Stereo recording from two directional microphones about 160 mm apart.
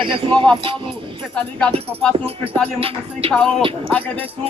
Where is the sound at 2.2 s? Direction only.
35° right (ahead or behind).